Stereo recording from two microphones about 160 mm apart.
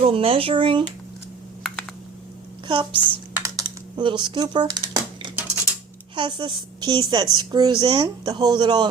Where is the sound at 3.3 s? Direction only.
20° right (ahead or behind).